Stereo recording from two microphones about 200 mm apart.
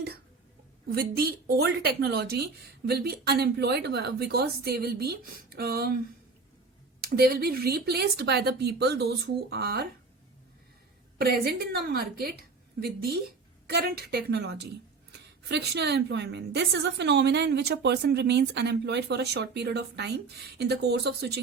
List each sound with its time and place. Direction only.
0.9 s speech: 50° right (ahead or behind)
7.0 s speech: 50° right (ahead or behind)
11.2 s a woman's voice: 50° right (ahead or behind)